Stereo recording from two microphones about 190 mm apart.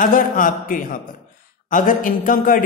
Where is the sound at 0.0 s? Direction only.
45° left (ahead or behind).